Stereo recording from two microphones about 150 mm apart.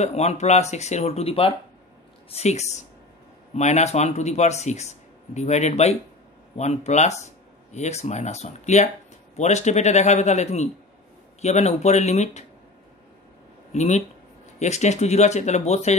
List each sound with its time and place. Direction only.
0.0 s speech: 45° left (ahead or behind)
13.7 s speech: 50° left (ahead or behind)